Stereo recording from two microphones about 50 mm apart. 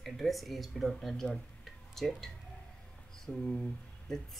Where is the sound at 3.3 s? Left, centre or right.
Left.